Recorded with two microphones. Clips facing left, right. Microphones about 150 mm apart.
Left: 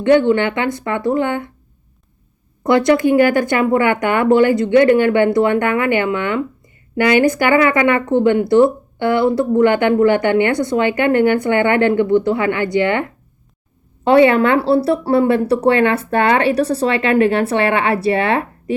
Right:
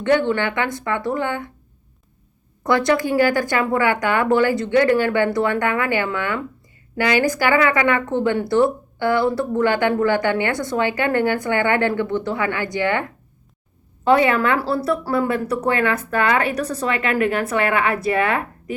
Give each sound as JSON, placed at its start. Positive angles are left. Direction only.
{"t": 0.0, "sound": "speech", "side_deg": 20}
{"t": 2.6, "sound": "speech", "side_deg": 20}
{"t": 14.1, "sound": "speech", "side_deg": 30}